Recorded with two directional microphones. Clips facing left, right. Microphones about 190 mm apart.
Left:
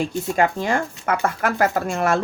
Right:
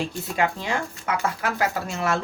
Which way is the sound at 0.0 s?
50° left (ahead or behind).